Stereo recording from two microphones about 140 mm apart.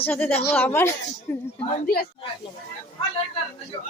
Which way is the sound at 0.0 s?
10° left (ahead or behind).